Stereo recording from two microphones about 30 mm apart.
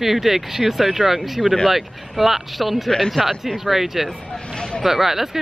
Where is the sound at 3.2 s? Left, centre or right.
Centre.